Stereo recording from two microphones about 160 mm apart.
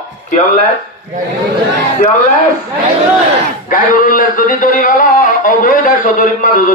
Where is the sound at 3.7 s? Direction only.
60° left (ahead or behind).